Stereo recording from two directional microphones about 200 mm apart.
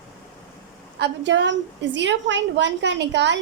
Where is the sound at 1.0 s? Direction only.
65° right (ahead or behind).